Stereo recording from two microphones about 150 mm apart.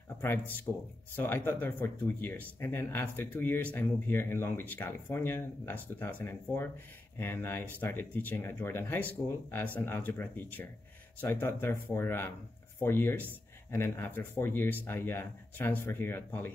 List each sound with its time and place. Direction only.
1.1 s speech: 15° left (ahead or behind)